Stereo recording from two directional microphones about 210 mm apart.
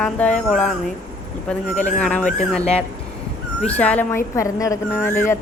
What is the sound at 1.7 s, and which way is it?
Speech, 35° left (ahead or behind).